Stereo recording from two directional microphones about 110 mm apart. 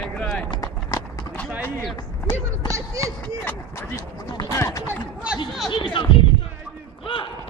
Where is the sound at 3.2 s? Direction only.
20° left (ahead or behind).